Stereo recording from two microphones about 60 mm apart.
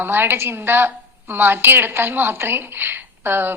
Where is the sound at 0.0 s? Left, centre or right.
Right.